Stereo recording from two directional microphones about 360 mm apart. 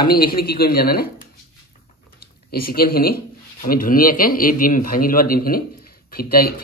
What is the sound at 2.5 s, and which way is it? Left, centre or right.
Speech, left.